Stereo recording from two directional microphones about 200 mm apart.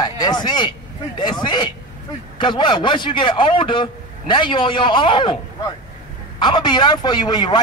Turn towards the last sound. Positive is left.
turn(degrees=20)  # may be behind; listen again after turning